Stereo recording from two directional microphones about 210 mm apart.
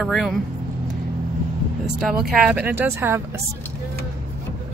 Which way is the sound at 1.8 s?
Centre (ahead or behind).